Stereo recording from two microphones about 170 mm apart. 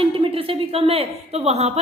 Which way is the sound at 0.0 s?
30° right (ahead or behind).